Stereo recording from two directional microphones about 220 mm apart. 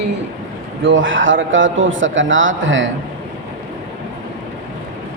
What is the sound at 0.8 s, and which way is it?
A man's voice, 60° right (ahead or behind).